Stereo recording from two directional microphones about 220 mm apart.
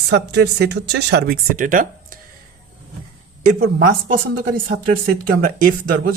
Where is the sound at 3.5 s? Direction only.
45° right (ahead or behind).